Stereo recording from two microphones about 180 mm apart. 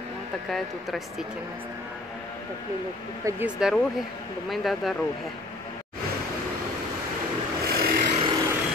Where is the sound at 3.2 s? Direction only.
10° right (ahead or behind).